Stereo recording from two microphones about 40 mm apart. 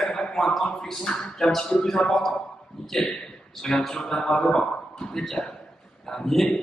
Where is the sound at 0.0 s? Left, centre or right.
Centre.